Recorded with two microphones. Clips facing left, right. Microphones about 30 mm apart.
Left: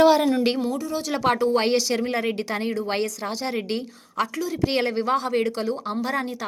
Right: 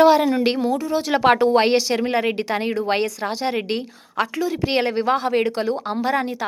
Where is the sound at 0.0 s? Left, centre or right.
Centre.